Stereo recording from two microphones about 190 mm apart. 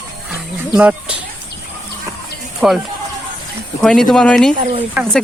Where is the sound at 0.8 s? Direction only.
5° right (ahead or behind).